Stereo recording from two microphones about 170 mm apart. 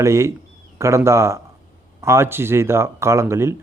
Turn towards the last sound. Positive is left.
turn(degrees=-15)  # may be behind; listen again after turning